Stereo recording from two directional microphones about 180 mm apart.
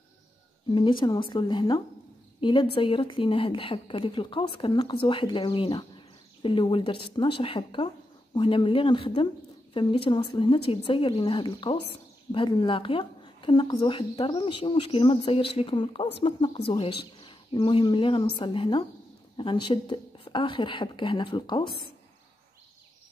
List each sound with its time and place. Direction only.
0.7 s speech: 25° left (ahead or behind)